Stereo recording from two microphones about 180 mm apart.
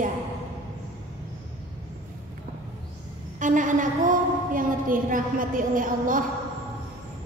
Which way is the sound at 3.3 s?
45° right (ahead or behind).